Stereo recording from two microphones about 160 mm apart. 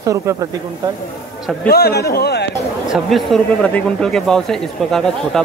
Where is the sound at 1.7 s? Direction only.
75° left (ahead or behind); by 2.5 s 90° left.